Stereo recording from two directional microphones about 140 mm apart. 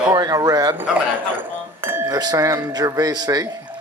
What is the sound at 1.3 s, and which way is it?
Chink, 15° right (ahead or behind).